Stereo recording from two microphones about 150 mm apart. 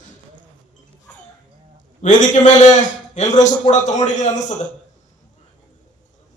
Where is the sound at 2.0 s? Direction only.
60° left (ahead or behind).